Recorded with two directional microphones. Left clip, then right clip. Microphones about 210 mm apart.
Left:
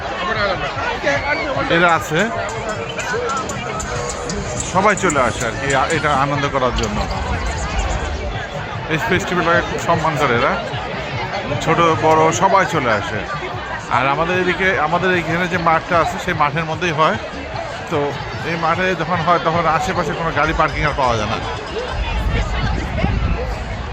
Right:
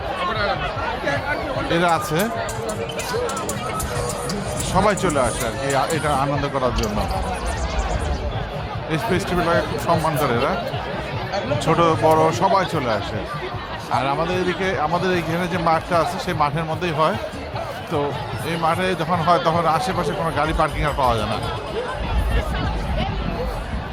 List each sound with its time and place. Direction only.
1.0 s speech: 40° left (ahead or behind)
1.7 s a man's voice: 5° right (ahead or behind)
4.8 s a man's voice: centre (ahead or behind)
8.9 s a man's voice: 5° right (ahead or behind)
11.7 s a man's voice: 5° right (ahead or behind)
18.4 s a man's voice: centre (ahead or behind)